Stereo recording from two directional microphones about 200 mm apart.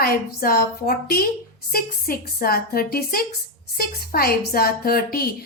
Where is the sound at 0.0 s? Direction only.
45° left (ahead or behind).